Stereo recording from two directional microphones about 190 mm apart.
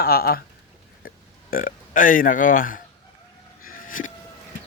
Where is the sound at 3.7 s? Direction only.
45° left (ahead or behind).